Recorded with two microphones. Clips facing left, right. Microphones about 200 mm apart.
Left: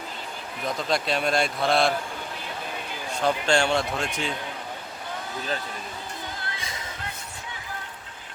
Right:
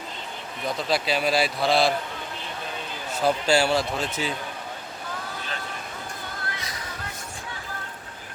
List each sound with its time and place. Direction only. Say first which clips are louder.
0.6 s a man's voice: right 1 dB; centre (ahead or behind)
3.1 s a man's voice: right 2 dB; 5° right (ahead or behind)
6.4 s music: right 1 dB; 25° left (ahead or behind)